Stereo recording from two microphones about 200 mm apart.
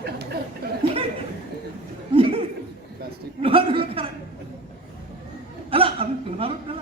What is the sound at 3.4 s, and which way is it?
Speech, 25° right (ahead or behind).